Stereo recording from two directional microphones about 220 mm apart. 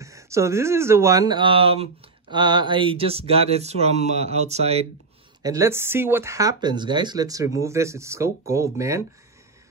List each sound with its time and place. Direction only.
0.0 s speech: 15° right (ahead or behind); by 4.8 s 30° right (ahead or behind)
5.4 s speech: 15° right (ahead or behind)